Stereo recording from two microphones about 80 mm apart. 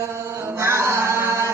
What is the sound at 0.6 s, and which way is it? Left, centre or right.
Chant, right.